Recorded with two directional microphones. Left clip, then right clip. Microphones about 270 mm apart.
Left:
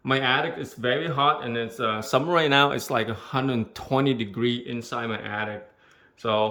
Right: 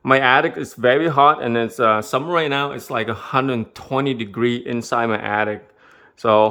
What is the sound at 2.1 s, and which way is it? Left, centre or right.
Speech, centre.